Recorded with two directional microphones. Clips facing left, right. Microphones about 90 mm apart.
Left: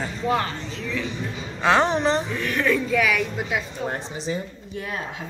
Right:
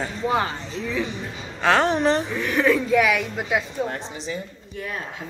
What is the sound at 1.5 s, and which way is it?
Speech, 15° left (ahead or behind).